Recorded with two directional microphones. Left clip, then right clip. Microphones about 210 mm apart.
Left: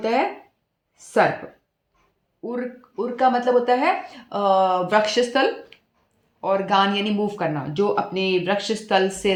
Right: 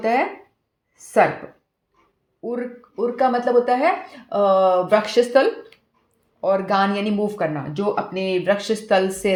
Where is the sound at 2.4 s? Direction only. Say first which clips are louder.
Right 2 dB; 35° right (ahead or behind).